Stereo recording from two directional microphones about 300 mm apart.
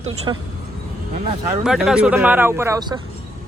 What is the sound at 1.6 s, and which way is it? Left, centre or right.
Speech, centre.